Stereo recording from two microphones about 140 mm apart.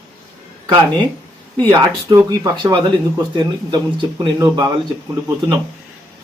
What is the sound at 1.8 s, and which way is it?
Speech, 30° right (ahead or behind).